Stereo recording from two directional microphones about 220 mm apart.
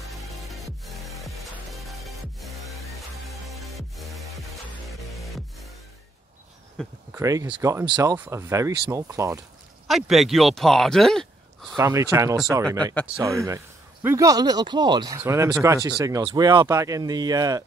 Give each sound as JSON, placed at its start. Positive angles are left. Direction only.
{"t": 0.1, "sound": "music", "side_deg": 0}
{"t": 7.1, "sound": "speech", "side_deg": -15}
{"t": 9.8, "sound": "speech", "side_deg": 0}
{"t": 11.7, "sound": "speech", "side_deg": -15}
{"t": 12.6, "sound": "speech", "side_deg": 5}
{"t": 13.2, "sound": "speech", "side_deg": -15}